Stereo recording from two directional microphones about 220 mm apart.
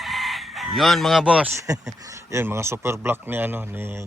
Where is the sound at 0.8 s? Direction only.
Centre (ahead or behind).